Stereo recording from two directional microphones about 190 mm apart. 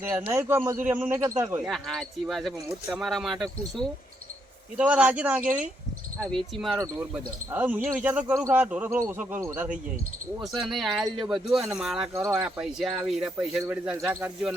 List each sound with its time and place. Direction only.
0.0 s speech: 10° right (ahead or behind)
1.6 s speech: centre (ahead or behind)
6.1 s speech: 5° left (ahead or behind)
7.1 s speech: 10° right (ahead or behind)
10.4 s speech: centre (ahead or behind)
11.0 s speech: 25° right (ahead or behind)
11.3 s speech: centre (ahead or behind)
12.1 s speech: 15° right (ahead or behind)
12.5 s speech: 5° right (ahead or behind)